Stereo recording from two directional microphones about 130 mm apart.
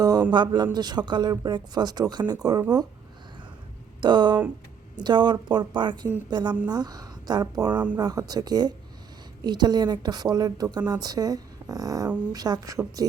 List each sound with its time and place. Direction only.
0.0 s speech: 30° right (ahead or behind)
4.0 s speech: 35° right (ahead or behind)
7.7 s speech: 10° right (ahead or behind)
7.9 s speech: 30° right (ahead or behind)